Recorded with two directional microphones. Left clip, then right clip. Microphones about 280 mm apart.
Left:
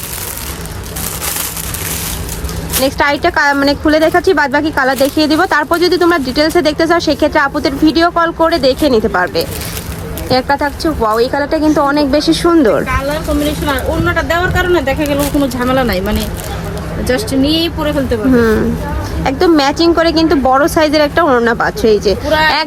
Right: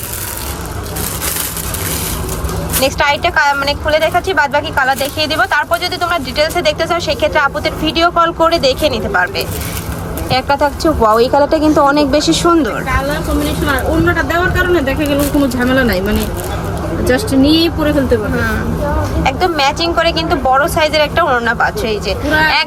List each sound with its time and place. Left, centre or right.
2.8 s speech: centre
10.2 s speech: centre
11.5 s speech: centre
12.3 s speech: centre
12.9 s speech: centre
19.2 s speech: centre